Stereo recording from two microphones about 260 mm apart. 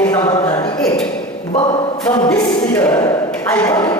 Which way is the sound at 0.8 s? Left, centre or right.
Centre.